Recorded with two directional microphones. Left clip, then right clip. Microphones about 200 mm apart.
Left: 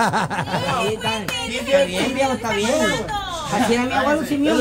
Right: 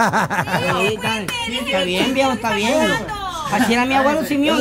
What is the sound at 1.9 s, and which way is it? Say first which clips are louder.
Speech: right 3 dB; 35° right (ahead or behind).